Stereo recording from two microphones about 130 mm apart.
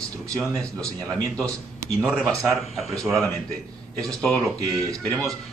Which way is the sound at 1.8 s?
15° right (ahead or behind).